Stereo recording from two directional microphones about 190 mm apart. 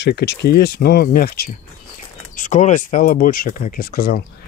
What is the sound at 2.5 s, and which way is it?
Speech, 40° left (ahead or behind).